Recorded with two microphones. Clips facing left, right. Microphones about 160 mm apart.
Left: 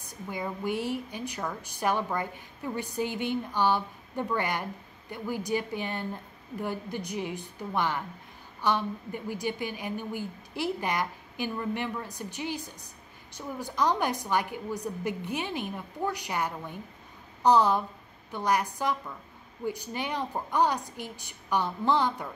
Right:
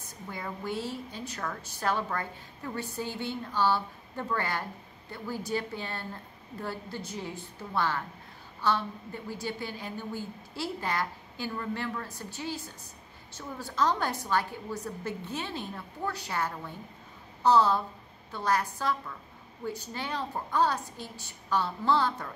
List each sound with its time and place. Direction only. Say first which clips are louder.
0.0 s a woman's voice: left 4 dB; 15° left (ahead or behind)